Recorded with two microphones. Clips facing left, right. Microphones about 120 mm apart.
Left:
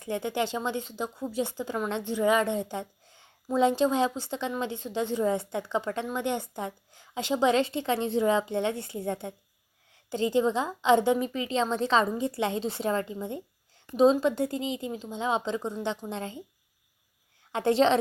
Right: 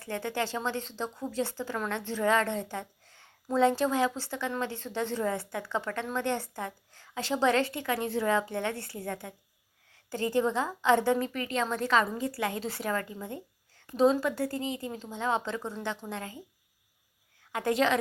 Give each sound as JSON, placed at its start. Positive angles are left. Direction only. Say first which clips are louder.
{"t": 0.0, "sound": "a woman's voice", "louder": "left 3 dB", "side_deg": 15}
{"t": 17.5, "sound": "a woman's voice", "louder": "left 4 dB", "side_deg": 25}